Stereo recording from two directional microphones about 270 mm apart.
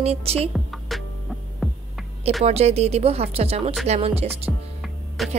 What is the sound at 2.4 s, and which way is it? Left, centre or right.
Speech, right.